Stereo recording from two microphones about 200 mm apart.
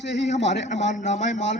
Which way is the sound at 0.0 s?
60° left (ahead or behind).